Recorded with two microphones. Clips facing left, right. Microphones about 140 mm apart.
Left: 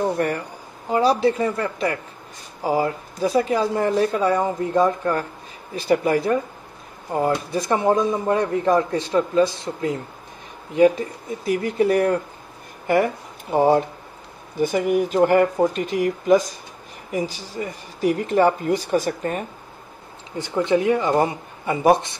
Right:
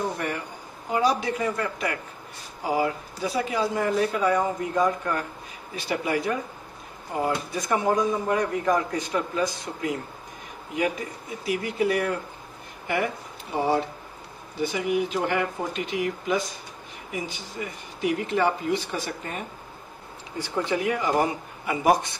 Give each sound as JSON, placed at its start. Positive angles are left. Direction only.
{"t": 0.2, "sound": "speech", "side_deg": 45}
{"t": 0.8, "sound": "a man's voice", "side_deg": 30}
{"t": 20.3, "sound": "a man's voice", "side_deg": 20}